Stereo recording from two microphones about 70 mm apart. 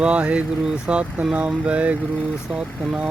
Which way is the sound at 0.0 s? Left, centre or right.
Centre.